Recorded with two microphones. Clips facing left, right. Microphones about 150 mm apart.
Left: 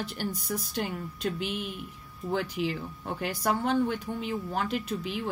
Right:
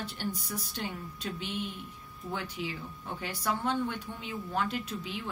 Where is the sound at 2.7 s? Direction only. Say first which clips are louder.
Left 6 dB; 55° left (ahead or behind).